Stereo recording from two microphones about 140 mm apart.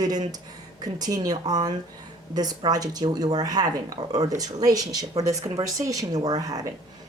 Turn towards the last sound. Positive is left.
turn(degrees=-25)  # may be behind; listen again after turning